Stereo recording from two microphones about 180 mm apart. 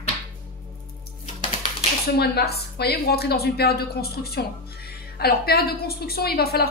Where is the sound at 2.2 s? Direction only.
60° left (ahead or behind).